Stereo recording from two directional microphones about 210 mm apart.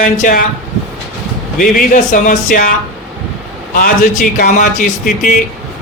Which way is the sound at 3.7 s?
40° left (ahead or behind).